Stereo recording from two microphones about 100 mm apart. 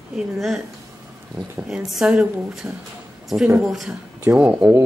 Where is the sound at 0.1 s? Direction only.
Centre (ahead or behind).